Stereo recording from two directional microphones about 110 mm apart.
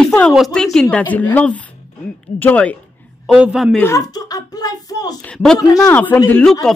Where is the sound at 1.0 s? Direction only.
15° left (ahead or behind).